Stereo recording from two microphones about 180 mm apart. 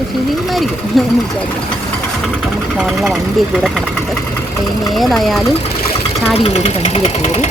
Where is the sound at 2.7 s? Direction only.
Centre (ahead or behind).